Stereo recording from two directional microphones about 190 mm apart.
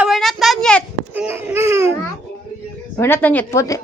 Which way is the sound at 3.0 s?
10° left (ahead or behind).